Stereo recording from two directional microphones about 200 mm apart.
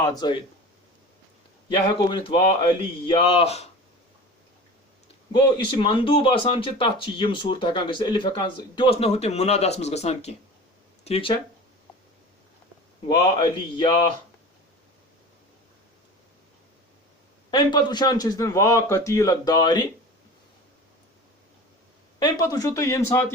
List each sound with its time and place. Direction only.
0.0 s speech: 20° left (ahead or behind)
2.0 s speech: 25° left (ahead or behind)
5.8 s speech: 25° left (ahead or behind)
13.1 s speech: 20° left (ahead or behind)
17.5 s speech: 20° left (ahead or behind)
22.2 s speech: 20° left (ahead or behind)